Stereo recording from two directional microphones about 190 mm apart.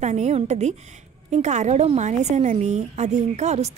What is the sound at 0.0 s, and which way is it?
A woman's voice, 35° right (ahead or behind).